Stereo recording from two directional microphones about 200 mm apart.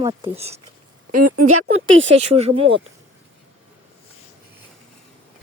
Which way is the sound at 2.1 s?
30° right (ahead or behind).